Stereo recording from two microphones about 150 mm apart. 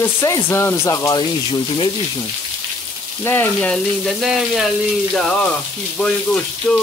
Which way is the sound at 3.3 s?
10° left (ahead or behind).